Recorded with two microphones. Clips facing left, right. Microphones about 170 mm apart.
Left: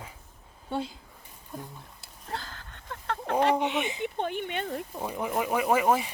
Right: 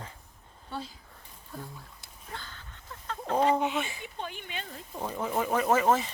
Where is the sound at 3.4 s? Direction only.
70° left (ahead or behind).